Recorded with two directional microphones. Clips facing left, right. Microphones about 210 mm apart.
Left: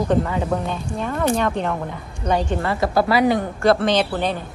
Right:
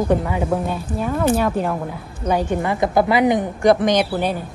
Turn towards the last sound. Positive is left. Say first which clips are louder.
# right 1 dB
turn(degrees=-10)  # may be behind; listen again after turning